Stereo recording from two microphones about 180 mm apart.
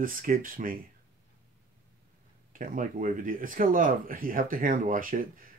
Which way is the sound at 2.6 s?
50° right (ahead or behind).